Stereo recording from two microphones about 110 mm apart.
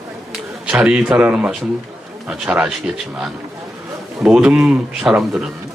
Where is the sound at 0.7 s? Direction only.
10° right (ahead or behind).